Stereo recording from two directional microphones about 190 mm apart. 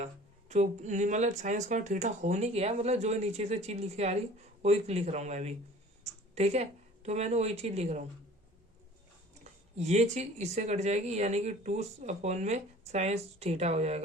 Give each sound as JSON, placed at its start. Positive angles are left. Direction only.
{"t": 0.0, "sound": "a woman's voice", "side_deg": -35}
{"t": 9.4, "sound": "a woman's voice", "side_deg": -35}